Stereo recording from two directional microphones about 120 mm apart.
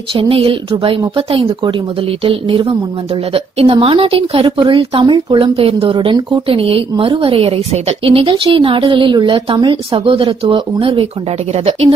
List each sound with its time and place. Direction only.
0.1 s speech: 50° right (ahead or behind)
4.5 s speech: 30° right (ahead or behind); by 11.1 s 50° right (ahead or behind)
11.5 s speech: 60° right (ahead or behind)